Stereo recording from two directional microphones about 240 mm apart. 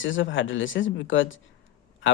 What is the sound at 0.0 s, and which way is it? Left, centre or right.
Speech, left.